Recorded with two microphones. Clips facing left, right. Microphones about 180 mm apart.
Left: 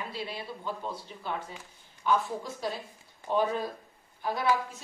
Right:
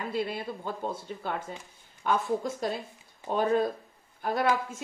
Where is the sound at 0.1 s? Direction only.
50° right (ahead or behind).